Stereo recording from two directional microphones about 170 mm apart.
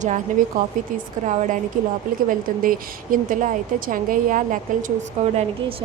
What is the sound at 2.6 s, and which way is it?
A woman's voice, 55° right (ahead or behind).